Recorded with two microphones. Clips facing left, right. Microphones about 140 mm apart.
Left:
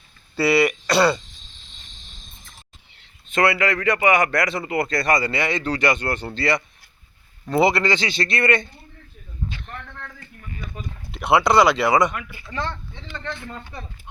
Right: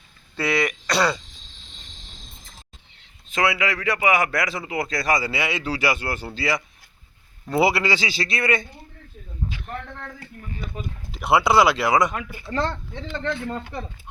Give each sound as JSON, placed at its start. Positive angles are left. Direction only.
{"t": 0.3, "sound": "speech", "side_deg": 5}
{"t": 3.0, "sound": "a man's voice", "side_deg": 0}
{"t": 9.5, "sound": "a sound", "side_deg": -10}
{"t": 10.4, "sound": "a sound", "side_deg": -30}
{"t": 11.1, "sound": "a man's voice", "side_deg": 0}
{"t": 12.3, "sound": "speech", "side_deg": -50}